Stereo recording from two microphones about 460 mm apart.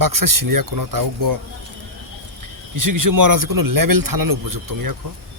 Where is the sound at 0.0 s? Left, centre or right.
Right.